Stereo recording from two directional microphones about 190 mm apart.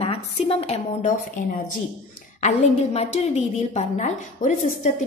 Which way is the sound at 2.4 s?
35° left (ahead or behind).